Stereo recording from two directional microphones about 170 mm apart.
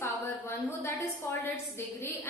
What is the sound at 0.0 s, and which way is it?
A woman's voice, 15° left (ahead or behind).